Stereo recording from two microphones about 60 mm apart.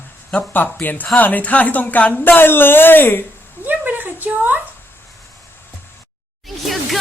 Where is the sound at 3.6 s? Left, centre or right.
Right.